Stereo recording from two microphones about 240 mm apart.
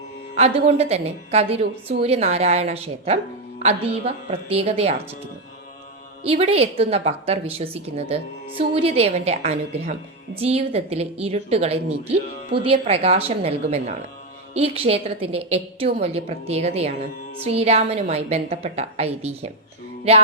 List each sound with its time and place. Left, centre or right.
0.3 s a woman's voice: right